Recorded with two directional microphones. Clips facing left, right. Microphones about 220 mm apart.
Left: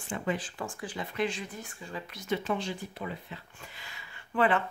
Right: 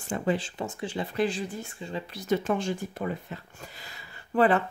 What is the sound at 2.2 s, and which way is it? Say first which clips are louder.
Speech: right 5 dB; 45° right (ahead or behind).